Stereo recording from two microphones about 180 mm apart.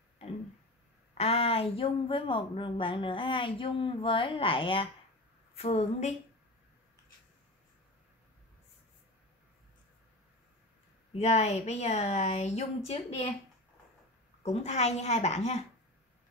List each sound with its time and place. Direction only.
1.1 s a woman's voice: 35° left (ahead or behind)
11.1 s a woman's voice: 35° left (ahead or behind)
14.4 s a woman's voice: 35° left (ahead or behind)